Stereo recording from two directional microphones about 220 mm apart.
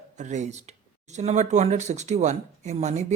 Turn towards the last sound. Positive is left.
turn(degrees=-30)  # may be behind; listen again after turning